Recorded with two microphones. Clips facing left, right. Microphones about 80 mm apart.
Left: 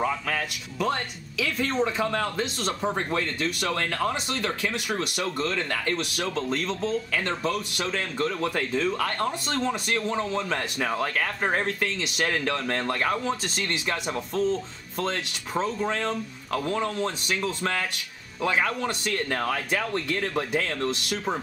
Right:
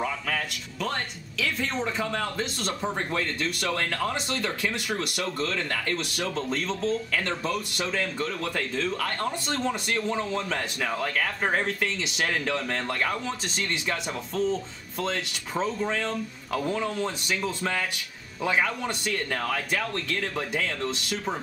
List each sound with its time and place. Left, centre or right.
0.0 s speech: centre